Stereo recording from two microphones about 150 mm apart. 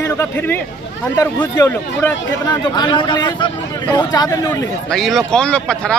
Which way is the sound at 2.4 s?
30° left (ahead or behind).